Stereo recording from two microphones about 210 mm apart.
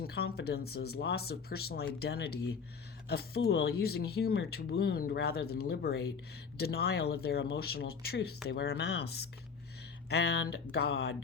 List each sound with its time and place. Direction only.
0.1 s speech: 50° left (ahead or behind)